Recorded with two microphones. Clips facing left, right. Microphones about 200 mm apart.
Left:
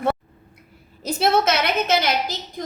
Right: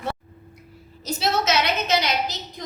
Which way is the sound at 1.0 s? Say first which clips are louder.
Left 5 dB; 55° left (ahead or behind).